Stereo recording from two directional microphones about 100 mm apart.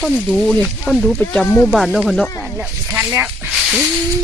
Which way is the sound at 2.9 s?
25° right (ahead or behind).